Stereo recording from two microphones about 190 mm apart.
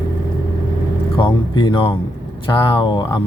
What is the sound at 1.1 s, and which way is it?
Speech, 25° left (ahead or behind).